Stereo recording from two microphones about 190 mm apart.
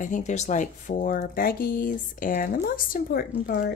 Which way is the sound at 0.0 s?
40° left (ahead or behind).